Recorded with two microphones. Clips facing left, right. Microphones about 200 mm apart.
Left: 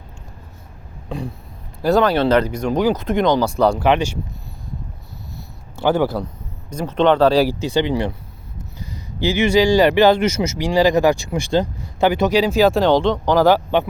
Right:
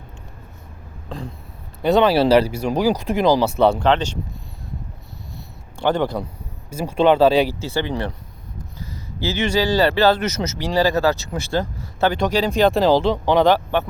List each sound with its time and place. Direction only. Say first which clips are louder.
1.8 s speech: even; centre (ahead or behind)
2.1 s speech: right 1 dB; 10° right (ahead or behind)
3.8 s speech: left 1 dB; 10° left (ahead or behind)
5.7 s speech: left 2 dB; 5° left (ahead or behind)
6.7 s speech: even; 10° right (ahead or behind)
7.4 s speech: left 5 dB; 15° left (ahead or behind)